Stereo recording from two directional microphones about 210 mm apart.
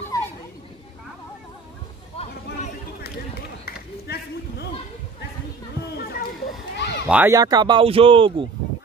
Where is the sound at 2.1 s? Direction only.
30° left (ahead or behind).